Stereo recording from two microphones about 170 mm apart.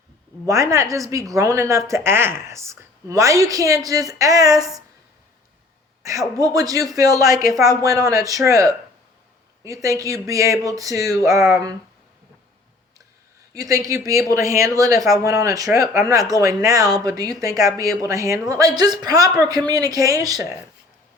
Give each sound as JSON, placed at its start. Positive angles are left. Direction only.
{"t": 0.4, "sound": "speech", "side_deg": -20}
{"t": 6.0, "sound": "speech", "side_deg": -20}
{"t": 13.5, "sound": "speech", "side_deg": -20}